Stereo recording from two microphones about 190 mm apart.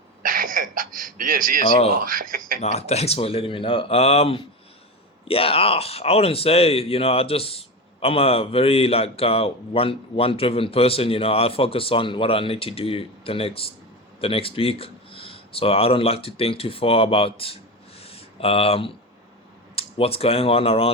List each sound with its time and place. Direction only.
0.2 s a sound: 45° right (ahead or behind)
1.6 s speech: 25° left (ahead or behind)
2.0 s speech: 45° right (ahead or behind)
2.7 s a man's voice: 35° left (ahead or behind)
18.0 s a sound: 30° left (ahead or behind)
19.7 s speech: 30° left (ahead or behind)